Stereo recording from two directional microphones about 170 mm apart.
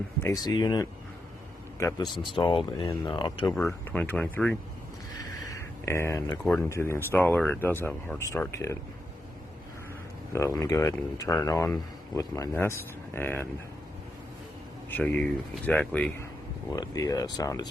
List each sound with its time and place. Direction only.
0.2 s speech: 20° left (ahead or behind)
3.6 s speech: 10° left (ahead or behind)
5.4 s a sound: 20° left (ahead or behind)
6.4 s speech: 5° left (ahead or behind)
6.7 s speech: 15° left (ahead or behind)
10.3 s speech: 20° left (ahead or behind)
14.8 s speech: 10° left (ahead or behind)
16.7 s speech: 20° left (ahead or behind)